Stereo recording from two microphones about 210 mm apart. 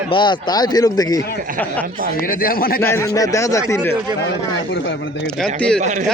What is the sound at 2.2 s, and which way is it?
Speech, 45° left (ahead or behind).